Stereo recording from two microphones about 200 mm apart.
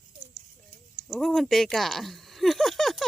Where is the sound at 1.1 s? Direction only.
Centre (ahead or behind).